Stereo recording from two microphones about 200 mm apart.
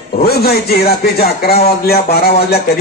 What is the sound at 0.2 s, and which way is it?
A man's voice, 50° left (ahead or behind).